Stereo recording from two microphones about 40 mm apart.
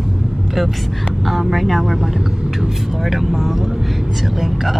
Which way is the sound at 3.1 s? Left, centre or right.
Centre.